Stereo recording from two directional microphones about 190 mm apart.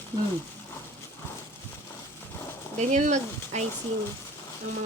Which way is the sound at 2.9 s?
40° right (ahead or behind).